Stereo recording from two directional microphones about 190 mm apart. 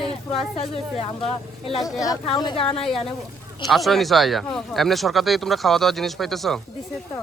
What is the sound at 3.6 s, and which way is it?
Speech, centre (ahead or behind).